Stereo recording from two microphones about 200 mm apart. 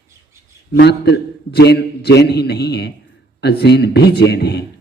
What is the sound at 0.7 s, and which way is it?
A man's voice, 55° left (ahead or behind).